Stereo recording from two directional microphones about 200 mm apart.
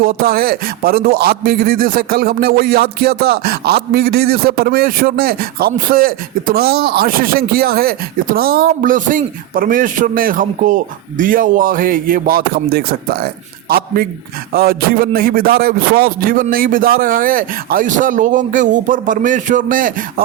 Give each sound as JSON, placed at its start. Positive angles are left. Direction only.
{"t": 0.0, "sound": "a man's voice", "side_deg": -45}